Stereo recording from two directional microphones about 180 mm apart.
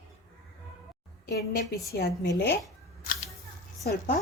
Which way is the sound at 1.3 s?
60° left (ahead or behind).